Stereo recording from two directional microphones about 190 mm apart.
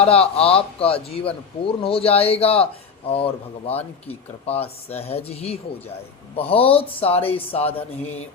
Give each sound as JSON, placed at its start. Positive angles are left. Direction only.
{"t": 0.0, "sound": "speech", "side_deg": 30}